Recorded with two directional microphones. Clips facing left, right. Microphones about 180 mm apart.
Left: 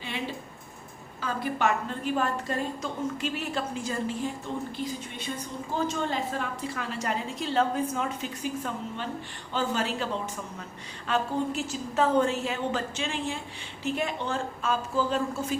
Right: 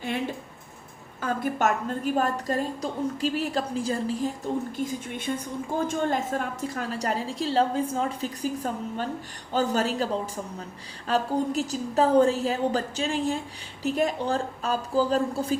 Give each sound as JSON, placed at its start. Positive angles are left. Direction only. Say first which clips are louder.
{"t": 0.0, "sound": "a woman's voice", "louder": "right 5 dB", "side_deg": -50}